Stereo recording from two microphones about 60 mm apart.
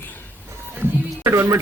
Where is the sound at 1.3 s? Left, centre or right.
Right.